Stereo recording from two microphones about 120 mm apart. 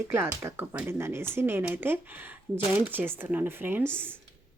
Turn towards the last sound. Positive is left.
turn(degrees=-20)  # may be behind; listen again after turning